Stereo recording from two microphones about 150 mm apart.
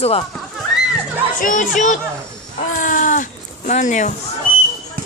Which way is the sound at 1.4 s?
60° left (ahead or behind).